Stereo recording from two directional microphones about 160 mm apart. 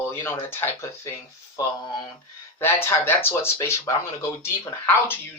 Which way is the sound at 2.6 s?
15° left (ahead or behind).